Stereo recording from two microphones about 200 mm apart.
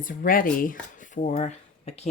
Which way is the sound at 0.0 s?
45° left (ahead or behind).